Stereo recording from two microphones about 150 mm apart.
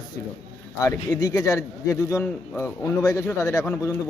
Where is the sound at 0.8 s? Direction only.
25° left (ahead or behind).